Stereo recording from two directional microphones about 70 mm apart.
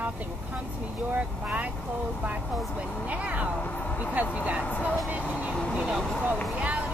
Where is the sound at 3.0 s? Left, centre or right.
Centre.